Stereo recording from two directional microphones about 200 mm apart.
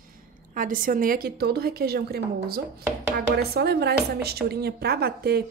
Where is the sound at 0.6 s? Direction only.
45° right (ahead or behind).